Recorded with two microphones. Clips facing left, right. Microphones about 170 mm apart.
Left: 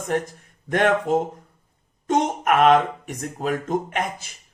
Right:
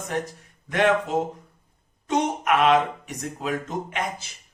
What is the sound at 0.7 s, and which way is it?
A man's voice, 50° left (ahead or behind).